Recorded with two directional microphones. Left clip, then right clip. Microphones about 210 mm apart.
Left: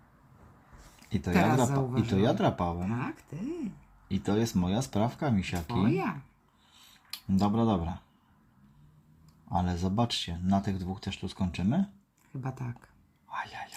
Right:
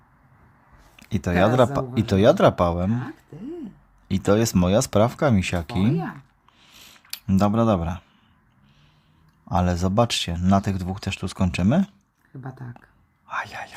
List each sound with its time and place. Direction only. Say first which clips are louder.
0.9 s speech: right 7 dB; 35° right (ahead or behind)
4.1 s speech: right 10 dB; 35° right (ahead or behind)
7.1 s speech: right 8 dB; 35° right (ahead or behind)
9.5 s speech: right 8 dB; 35° right (ahead or behind)
12.4 s speech: even; 30° left (ahead or behind)
13.3 s speech: right 8 dB; 35° right (ahead or behind)